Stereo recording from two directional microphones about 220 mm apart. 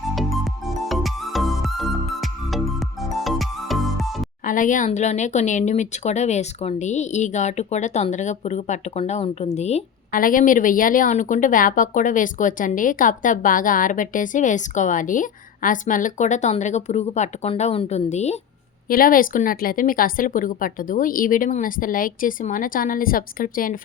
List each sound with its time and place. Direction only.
0.2 s music: centre (ahead or behind)
4.4 s speech: 35° left (ahead or behind)
18.9 s speech: 40° left (ahead or behind)